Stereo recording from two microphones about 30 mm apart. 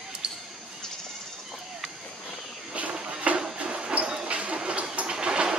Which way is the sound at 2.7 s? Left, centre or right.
Right.